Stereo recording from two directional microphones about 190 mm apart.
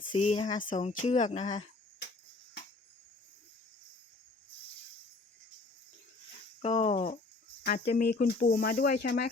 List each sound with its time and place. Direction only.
0.0 s speech: 30° left (ahead or behind)
6.6 s speech: 35° left (ahead or behind)
7.6 s speech: 50° left (ahead or behind)